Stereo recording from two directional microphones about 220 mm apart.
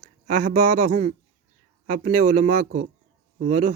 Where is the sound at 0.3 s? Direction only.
35° right (ahead or behind).